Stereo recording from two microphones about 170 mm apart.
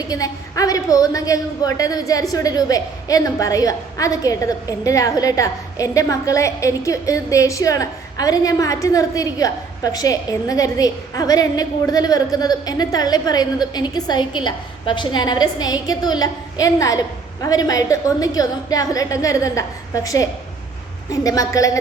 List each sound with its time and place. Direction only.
0.1 s a woman's voice: 20° left (ahead or behind)